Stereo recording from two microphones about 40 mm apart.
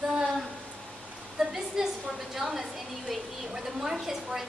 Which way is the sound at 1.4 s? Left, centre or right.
Centre.